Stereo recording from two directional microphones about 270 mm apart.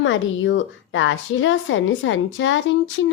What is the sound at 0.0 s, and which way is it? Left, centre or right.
A woman's voice, left.